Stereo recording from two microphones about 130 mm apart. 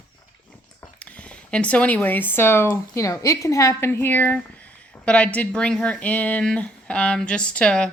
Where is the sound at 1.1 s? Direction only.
10° left (ahead or behind).